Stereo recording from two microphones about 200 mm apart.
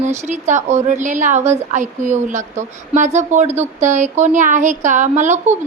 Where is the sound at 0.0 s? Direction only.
35° right (ahead or behind).